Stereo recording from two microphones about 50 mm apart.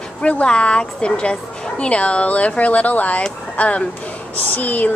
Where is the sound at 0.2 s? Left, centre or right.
Left.